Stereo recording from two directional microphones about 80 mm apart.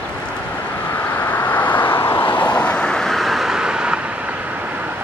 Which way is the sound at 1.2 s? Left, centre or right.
Left.